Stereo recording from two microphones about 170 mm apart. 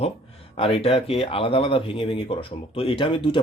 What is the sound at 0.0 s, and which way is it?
Speech, 35° left (ahead or behind).